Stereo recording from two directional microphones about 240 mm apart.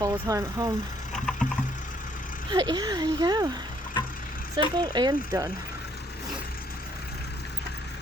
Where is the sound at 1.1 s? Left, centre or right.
Centre.